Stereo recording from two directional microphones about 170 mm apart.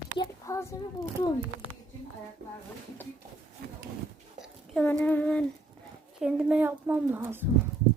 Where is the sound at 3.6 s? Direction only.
65° right (ahead or behind).